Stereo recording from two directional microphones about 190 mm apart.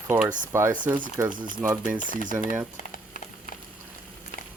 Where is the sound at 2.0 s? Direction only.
45° left (ahead or behind).